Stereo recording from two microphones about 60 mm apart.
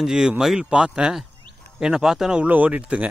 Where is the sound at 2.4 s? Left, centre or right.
Right.